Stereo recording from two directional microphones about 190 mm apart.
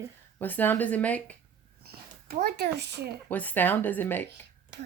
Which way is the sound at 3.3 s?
10° left (ahead or behind).